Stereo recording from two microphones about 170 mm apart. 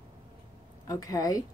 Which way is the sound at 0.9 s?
20° left (ahead or behind).